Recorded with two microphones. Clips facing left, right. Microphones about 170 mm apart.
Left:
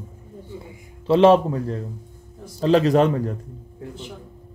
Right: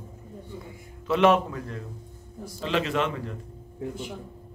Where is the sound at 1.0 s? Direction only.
30° left (ahead or behind).